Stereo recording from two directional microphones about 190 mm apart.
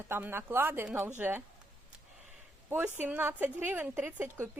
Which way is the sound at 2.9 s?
10° right (ahead or behind).